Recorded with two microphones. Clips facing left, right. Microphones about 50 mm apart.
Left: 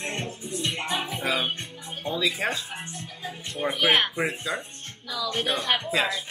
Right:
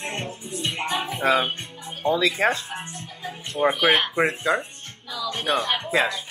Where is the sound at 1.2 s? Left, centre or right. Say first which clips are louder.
Right 8 dB; right.